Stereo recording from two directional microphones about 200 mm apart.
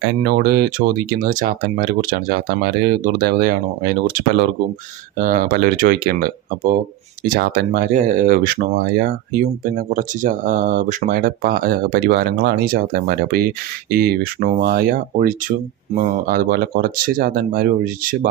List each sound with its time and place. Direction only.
0.2 s speech: 50° right (ahead or behind)
5.1 s speech: 45° right (ahead or behind)